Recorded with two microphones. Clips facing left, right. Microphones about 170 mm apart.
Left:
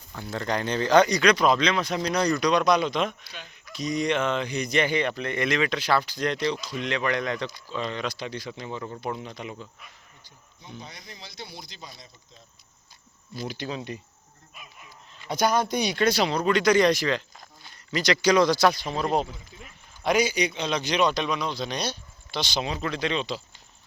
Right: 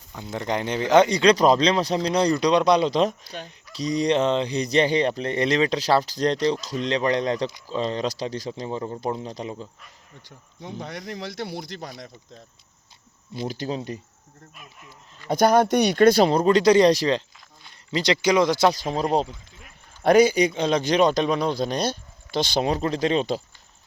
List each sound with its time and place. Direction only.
0.1 s speech: 20° right (ahead or behind); by 9.6 s 35° right (ahead or behind)
10.2 s speech: 85° right; by 11.9 s 70° right (ahead or behind)
13.5 s speech: 40° right (ahead or behind)
15.3 s a man's voice: 55° right (ahead or behind)
16.5 s speech: 35° right (ahead or behind)
18.7 s speech: 40° right (ahead or behind)
20.0 s a man's voice: 55° right (ahead or behind)
22.8 s speech: 40° right (ahead or behind)